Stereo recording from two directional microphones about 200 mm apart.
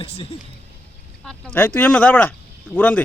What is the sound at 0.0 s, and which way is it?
Speech, 30° left (ahead or behind).